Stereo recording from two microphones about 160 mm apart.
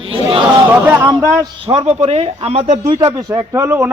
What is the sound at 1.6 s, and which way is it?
Speech, 40° right (ahead or behind).